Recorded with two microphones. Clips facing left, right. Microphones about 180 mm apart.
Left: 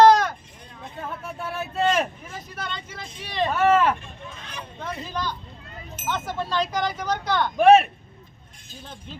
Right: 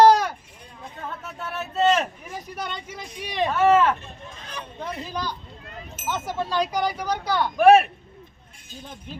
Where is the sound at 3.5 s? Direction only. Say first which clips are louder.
Right 1 dB; 15° left (ahead or behind).